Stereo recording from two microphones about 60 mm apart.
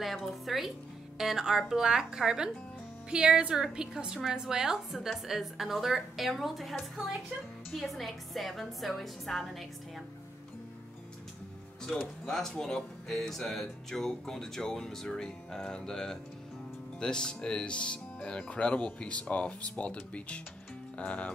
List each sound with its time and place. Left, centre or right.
0.0 s a woman's voice: centre
11.8 s speech: centre